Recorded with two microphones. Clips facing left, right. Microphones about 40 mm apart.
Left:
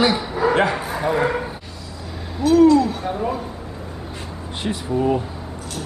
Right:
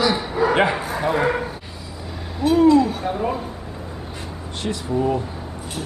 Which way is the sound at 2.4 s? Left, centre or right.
Centre.